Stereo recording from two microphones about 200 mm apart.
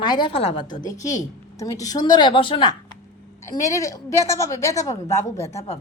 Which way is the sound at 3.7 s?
15° left (ahead or behind).